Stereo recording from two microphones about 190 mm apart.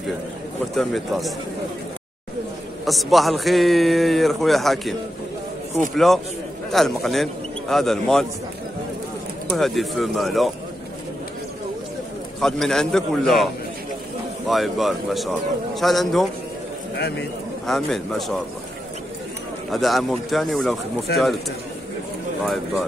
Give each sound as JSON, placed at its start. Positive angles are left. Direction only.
{"t": 0.7, "sound": "a man's voice", "side_deg": 0}
{"t": 2.8, "sound": "a man's voice", "side_deg": 0}
{"t": 5.9, "sound": "a man's voice", "side_deg": 0}
{"t": 9.5, "sound": "a man's voice", "side_deg": 0}
{"t": 12.4, "sound": "a man's voice", "side_deg": 0}
{"t": 14.5, "sound": "a man's voice", "side_deg": 0}
{"t": 17.6, "sound": "a man's voice", "side_deg": 0}
{"t": 19.7, "sound": "a man's voice", "side_deg": 0}
{"t": 21.1, "sound": "speech", "side_deg": 60}